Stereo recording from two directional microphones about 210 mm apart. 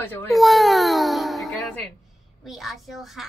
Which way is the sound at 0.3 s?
Centre (ahead or behind).